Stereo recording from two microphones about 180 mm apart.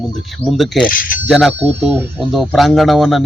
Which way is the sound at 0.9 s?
50° left (ahead or behind).